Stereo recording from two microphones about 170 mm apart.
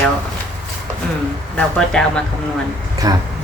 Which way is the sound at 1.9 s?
5° left (ahead or behind).